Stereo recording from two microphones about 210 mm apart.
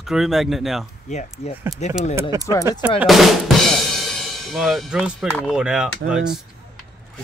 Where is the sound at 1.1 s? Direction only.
30° left (ahead or behind).